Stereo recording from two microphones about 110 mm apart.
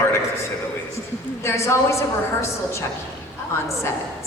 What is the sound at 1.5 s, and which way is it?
A woman's voice, 25° left (ahead or behind).